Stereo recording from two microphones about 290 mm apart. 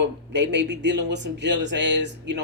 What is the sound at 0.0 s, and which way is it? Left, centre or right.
Speech, right.